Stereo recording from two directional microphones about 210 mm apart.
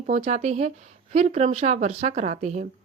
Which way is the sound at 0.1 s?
35° right (ahead or behind).